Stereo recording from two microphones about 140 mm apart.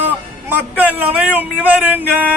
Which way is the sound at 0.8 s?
10° right (ahead or behind).